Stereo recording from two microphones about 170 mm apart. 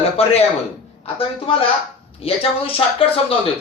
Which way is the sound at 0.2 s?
35° left (ahead or behind).